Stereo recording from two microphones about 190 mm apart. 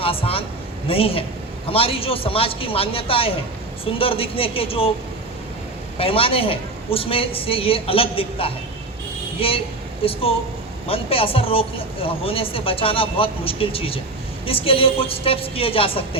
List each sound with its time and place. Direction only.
0.0 s speech: 30° left (ahead or behind)
6.0 s speech: 30° left (ahead or behind)